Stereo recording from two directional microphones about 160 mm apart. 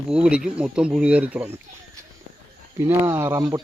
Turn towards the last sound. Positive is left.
turn(degrees=-15)  # may be behind; listen again after turning